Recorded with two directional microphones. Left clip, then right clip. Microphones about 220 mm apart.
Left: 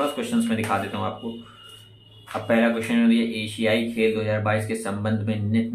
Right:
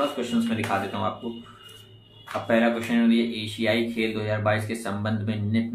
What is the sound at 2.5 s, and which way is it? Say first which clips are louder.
Speech: left 1 dB; 10° left (ahead or behind).